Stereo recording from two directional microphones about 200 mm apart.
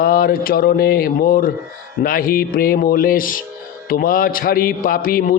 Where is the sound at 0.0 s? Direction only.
45° left (ahead or behind).